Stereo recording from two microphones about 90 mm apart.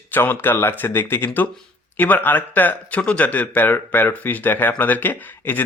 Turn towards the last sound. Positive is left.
turn(degrees=20)  # may be behind; listen again after turning